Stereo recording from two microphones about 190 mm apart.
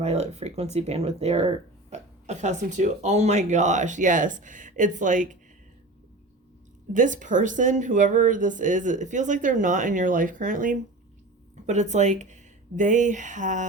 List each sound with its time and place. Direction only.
0.0 s speech: 35° right (ahead or behind)
6.9 s speech: 40° right (ahead or behind)